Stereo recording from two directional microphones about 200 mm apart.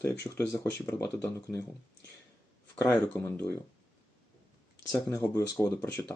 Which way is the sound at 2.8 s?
5° left (ahead or behind).